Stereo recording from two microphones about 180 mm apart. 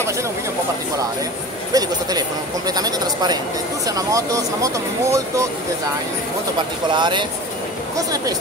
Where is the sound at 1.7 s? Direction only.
20° right (ahead or behind).